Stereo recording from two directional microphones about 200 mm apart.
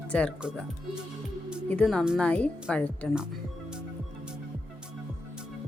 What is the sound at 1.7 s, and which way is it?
Speech, 5° left (ahead or behind).